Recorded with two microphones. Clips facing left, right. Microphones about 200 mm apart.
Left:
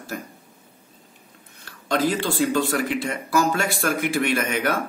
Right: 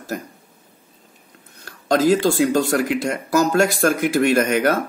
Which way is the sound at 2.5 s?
40° right (ahead or behind).